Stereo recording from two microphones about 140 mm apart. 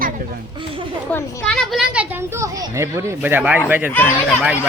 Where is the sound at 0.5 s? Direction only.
35° right (ahead or behind).